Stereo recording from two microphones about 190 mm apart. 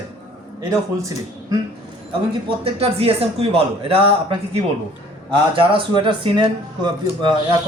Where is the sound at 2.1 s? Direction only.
30° right (ahead or behind).